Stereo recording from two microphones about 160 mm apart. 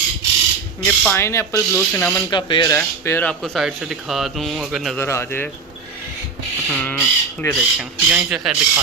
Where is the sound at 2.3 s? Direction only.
30° left (ahead or behind).